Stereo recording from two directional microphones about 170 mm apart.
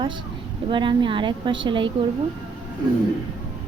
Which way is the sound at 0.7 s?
30° right (ahead or behind).